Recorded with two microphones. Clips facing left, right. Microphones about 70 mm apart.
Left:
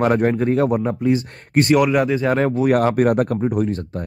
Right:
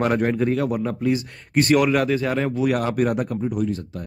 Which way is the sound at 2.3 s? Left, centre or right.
Left.